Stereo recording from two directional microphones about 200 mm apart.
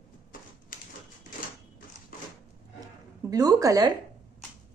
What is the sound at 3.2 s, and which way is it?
Speech, 15° right (ahead or behind).